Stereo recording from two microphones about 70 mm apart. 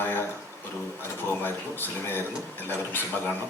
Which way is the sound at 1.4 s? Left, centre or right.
Left.